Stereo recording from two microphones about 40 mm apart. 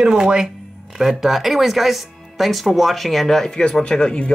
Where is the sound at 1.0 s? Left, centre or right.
Centre.